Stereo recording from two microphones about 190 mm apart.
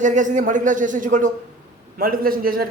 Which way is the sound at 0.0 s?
40° right (ahead or behind).